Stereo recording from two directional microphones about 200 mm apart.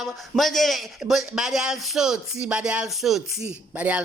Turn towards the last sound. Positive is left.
turn(degrees=-5)  # may be behind; listen again after turning